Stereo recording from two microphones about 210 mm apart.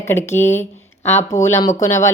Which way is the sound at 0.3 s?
10° left (ahead or behind).